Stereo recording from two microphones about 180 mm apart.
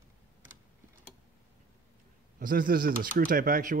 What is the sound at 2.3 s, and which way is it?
Speech, 50° right (ahead or behind).